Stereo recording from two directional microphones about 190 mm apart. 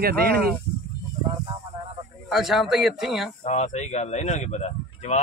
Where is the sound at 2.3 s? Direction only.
Centre (ahead or behind).